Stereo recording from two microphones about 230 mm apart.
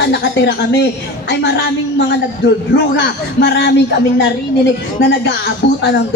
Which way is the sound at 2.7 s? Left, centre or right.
Left.